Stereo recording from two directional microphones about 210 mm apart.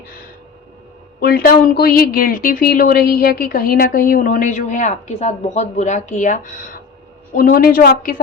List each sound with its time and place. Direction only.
1.2 s a woman's voice: 45° left (ahead or behind)